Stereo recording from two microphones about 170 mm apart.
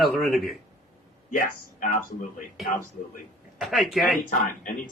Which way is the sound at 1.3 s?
50° left (ahead or behind).